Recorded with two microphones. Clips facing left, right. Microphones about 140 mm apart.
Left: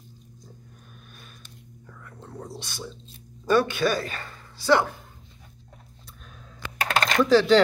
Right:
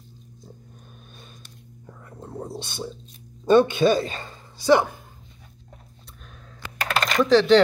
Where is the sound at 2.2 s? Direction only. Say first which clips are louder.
Right 5 dB; 25° right (ahead or behind).